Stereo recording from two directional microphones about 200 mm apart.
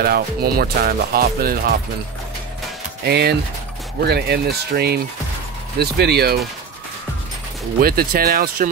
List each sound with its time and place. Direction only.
0.0 s speech: 50° right (ahead or behind)
3.0 s speech: 55° right (ahead or behind)
7.8 s speech: 50° right (ahead or behind)